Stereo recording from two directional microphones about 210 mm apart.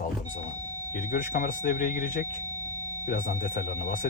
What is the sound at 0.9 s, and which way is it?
Speech, 40° left (ahead or behind).